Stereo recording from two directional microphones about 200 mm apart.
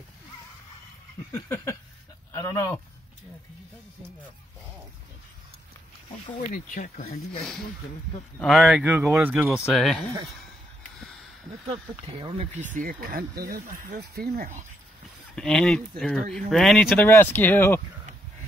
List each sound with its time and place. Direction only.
1.3 s speech: 15° left (ahead or behind)
6.5 s speech: 40° left (ahead or behind)
8.4 s speech: centre (ahead or behind)
11.7 s speech: 25° right (ahead or behind)
12.5 s speech: 40° right (ahead or behind)
15.3 s speech: 5° left (ahead or behind)
17.0 s speech: 10° left (ahead or behind)